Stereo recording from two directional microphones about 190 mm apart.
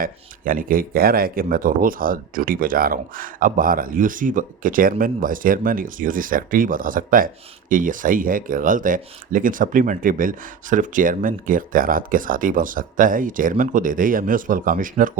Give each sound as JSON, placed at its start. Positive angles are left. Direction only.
{"t": 0.0, "sound": "speech", "side_deg": -45}